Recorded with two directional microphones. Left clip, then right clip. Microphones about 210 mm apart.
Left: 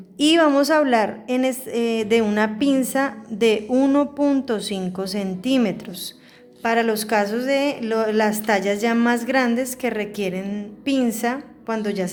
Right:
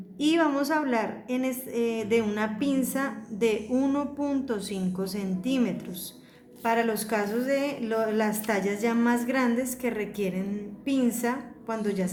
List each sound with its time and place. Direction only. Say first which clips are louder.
0.2 s a woman's voice: left 8 dB; 50° left (ahead or behind)